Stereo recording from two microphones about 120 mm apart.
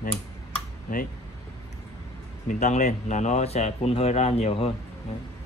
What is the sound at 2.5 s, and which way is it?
Speech, 80° left.